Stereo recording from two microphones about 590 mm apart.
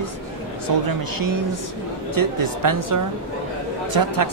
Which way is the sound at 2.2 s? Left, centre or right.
Right.